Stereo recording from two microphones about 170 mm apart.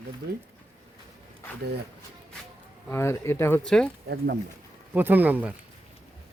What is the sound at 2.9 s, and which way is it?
Speech, 15° left (ahead or behind).